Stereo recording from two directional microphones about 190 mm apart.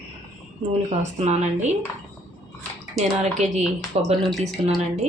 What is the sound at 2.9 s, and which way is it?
Speech, 35° right (ahead or behind).